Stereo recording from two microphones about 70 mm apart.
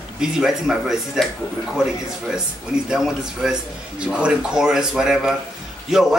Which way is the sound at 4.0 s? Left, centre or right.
Centre.